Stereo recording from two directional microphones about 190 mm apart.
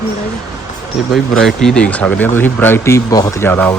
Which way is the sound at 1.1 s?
Centre (ahead or behind).